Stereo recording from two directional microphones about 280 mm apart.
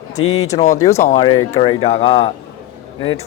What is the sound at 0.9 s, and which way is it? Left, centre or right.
Speech, left.